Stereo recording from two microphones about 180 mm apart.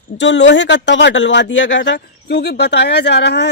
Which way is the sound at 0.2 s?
80° left.